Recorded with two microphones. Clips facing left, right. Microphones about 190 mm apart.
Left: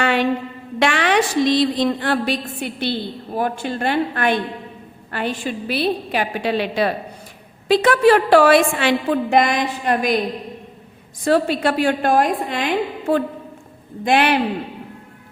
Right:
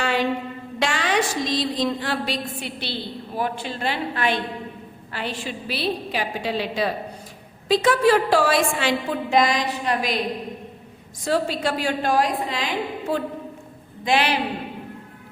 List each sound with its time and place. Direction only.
0.0 s a sound: 65° left (ahead or behind)
0.8 s a woman's voice: 65° left (ahead or behind)
11.3 s a woman's voice: 60° left (ahead or behind)